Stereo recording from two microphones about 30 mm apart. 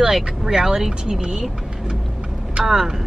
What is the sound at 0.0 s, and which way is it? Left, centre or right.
Speech, right.